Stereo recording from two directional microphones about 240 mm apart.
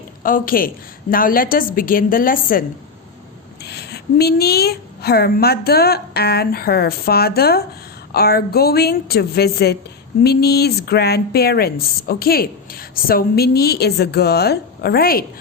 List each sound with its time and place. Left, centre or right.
0.2 s a woman's voice: left